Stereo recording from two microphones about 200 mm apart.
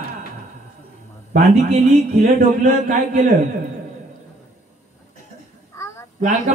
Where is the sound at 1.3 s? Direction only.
35° right (ahead or behind).